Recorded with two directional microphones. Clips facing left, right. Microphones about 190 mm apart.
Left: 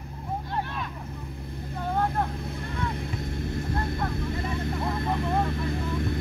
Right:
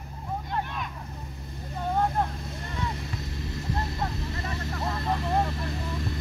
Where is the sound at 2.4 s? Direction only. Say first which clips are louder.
Left 2 dB; 60° left (ahead or behind).